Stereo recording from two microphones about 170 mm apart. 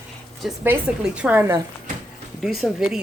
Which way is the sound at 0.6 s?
10° right (ahead or behind).